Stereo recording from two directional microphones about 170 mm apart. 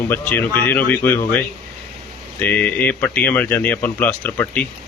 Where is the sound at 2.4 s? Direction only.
10° left (ahead or behind).